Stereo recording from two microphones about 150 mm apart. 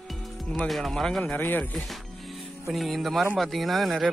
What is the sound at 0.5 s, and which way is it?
Speech, 5° left (ahead or behind).